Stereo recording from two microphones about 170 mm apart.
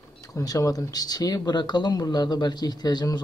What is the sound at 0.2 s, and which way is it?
Speech, 20° left (ahead or behind).